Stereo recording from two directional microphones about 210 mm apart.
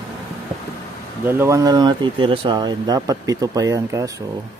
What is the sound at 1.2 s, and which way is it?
Speech, 10° right (ahead or behind).